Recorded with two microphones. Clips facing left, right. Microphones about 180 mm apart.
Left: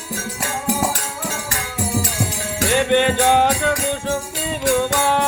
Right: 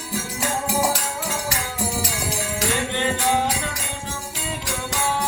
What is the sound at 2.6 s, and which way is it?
Music, 70° left (ahead or behind).